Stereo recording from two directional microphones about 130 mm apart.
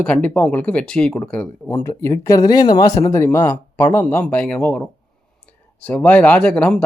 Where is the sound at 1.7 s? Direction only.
25° left (ahead or behind).